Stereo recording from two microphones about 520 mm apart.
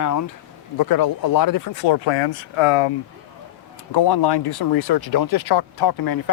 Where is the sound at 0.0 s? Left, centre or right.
Left.